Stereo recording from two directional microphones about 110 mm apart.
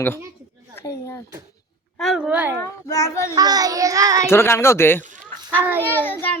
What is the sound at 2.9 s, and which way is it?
Speech, 30° left (ahead or behind).